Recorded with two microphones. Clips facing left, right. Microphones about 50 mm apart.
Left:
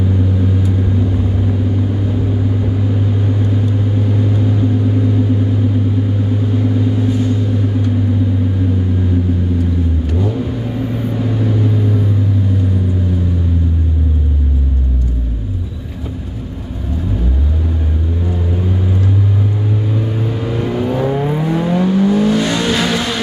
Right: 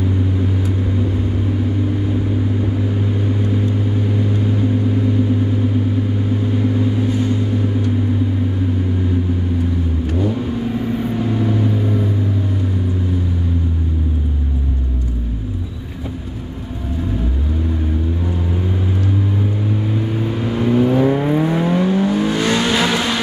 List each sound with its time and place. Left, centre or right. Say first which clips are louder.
7.0 s vehicle: left 2 dB; centre
20.2 s vehicle: right 1 dB; centre